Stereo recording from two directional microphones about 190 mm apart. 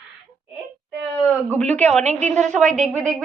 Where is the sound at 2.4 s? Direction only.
Centre (ahead or behind).